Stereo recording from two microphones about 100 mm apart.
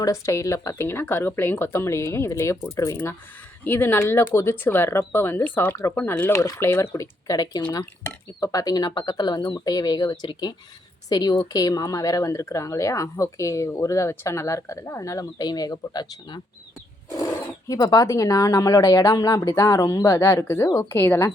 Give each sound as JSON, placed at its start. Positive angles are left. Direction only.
{"t": 0.0, "sound": "speech", "side_deg": 30}
{"t": 17.7, "sound": "speech", "side_deg": 40}